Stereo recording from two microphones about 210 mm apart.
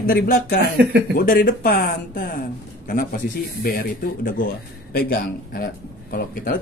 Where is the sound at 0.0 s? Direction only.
45° left (ahead or behind).